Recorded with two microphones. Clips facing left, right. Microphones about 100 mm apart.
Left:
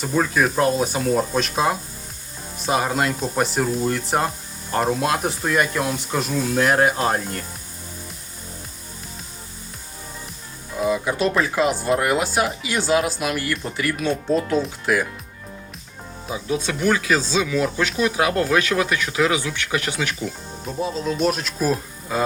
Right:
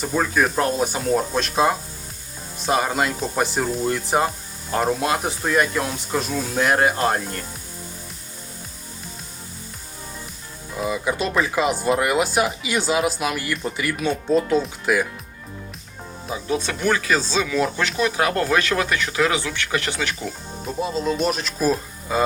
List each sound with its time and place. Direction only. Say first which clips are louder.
0.0 s speech: left 1 dB; centre (ahead or behind)
10.8 s speech: left 2 dB; centre (ahead or behind)
16.2 s speech: even; 5° left (ahead or behind)